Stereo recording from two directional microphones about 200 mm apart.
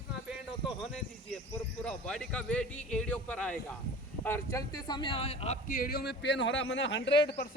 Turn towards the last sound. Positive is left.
turn(degrees=60)  # may be behind; listen again after turning